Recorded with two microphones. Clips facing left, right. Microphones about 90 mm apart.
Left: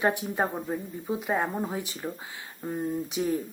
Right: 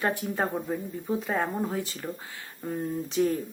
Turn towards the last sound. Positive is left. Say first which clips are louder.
# right 2 dB
turn(degrees=10)  # may be behind; listen again after turning